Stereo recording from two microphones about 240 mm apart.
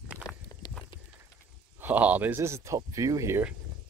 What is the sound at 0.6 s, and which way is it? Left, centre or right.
Horse, centre.